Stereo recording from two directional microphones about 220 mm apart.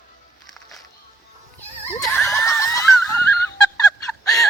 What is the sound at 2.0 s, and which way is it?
Snicker, 5° left (ahead or behind).